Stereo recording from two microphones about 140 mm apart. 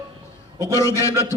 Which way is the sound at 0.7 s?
20° left (ahead or behind).